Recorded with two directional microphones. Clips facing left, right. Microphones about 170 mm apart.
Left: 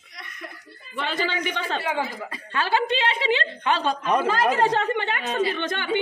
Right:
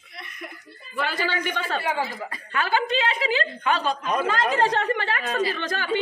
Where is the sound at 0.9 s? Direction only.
20° left (ahead or behind).